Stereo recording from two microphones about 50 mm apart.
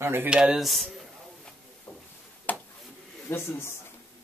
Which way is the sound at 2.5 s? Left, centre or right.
Left.